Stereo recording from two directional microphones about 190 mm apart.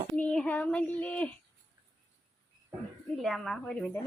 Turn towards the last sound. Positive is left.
turn(degrees=5)  # may be behind; listen again after turning